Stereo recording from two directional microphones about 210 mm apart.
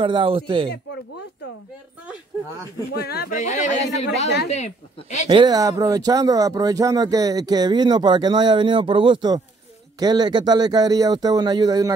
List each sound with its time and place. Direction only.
0.0 s speech: 25° right (ahead or behind)
2.9 s speech: 50° left (ahead or behind)
3.3 s speech: 35° left (ahead or behind)
5.3 s speech: 20° right (ahead or behind)